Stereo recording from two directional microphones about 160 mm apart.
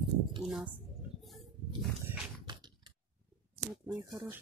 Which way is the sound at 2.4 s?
30° right (ahead or behind).